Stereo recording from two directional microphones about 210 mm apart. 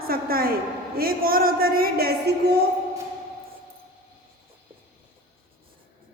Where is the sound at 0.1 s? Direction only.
45° right (ahead or behind).